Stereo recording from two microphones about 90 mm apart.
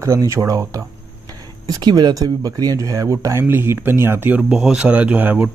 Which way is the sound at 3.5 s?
25° right (ahead or behind).